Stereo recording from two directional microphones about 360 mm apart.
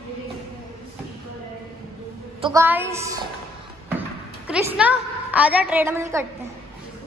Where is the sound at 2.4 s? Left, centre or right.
Centre.